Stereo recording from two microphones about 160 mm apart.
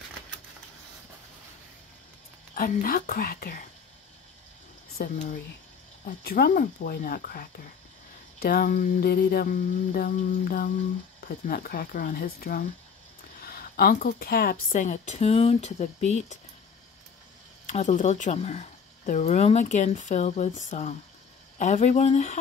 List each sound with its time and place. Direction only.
2.5 s mantra: 60° left (ahead or behind)
6.0 s mantra: 70° left (ahead or behind)
13.4 s speech: 70° left (ahead or behind); by 16.3 s 45° left (ahead or behind)
17.6 s speech: 50° left (ahead or behind)